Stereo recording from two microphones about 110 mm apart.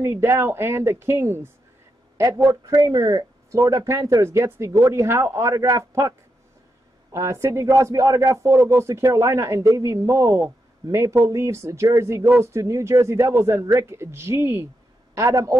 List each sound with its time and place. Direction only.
0.0 s a man's voice: 25° right (ahead or behind)